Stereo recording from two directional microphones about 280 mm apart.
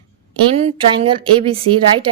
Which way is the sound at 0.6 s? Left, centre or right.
Right.